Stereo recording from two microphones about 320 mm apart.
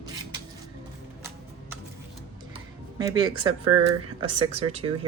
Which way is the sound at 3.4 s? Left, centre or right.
Right.